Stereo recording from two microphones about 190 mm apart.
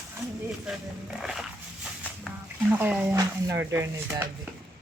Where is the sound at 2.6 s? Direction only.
10° right (ahead or behind).